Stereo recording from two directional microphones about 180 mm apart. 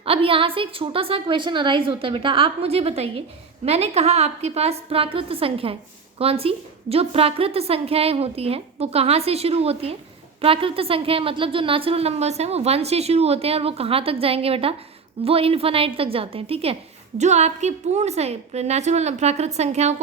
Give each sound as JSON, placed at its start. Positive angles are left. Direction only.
{"t": 0.0, "sound": "a woman's voice", "side_deg": -30}